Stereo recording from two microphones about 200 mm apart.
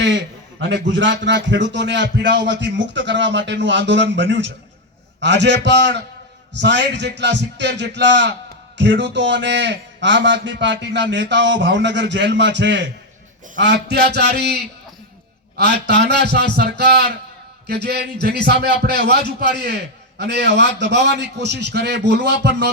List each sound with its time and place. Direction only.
0.7 s a man's voice: 65° right (ahead or behind)